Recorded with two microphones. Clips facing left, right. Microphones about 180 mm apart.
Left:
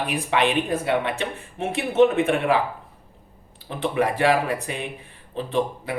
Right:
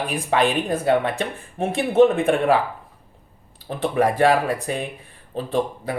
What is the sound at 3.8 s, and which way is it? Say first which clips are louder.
Speech: right 3 dB; 40° right (ahead or behind).